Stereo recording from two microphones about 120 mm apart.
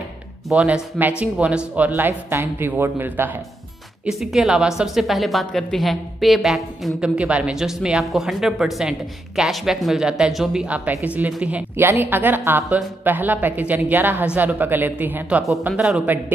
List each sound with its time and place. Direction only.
0.5 s a woman's voice: 5° right (ahead or behind)
4.0 s a woman's voice: 5° right (ahead or behind)